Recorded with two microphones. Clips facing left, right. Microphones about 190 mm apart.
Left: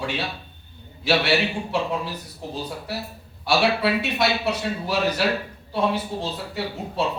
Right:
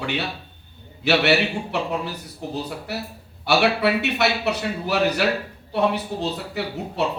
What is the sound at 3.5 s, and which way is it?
A woman's voice, 65° right (ahead or behind).